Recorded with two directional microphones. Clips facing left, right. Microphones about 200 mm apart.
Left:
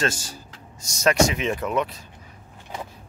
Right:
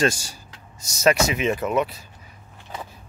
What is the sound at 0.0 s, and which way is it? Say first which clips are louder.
Speech: right 4 dB; 10° right (ahead or behind).